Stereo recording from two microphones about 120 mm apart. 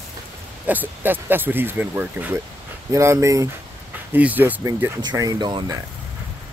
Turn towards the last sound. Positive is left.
turn(degrees=-40)  # may be behind; listen again after turning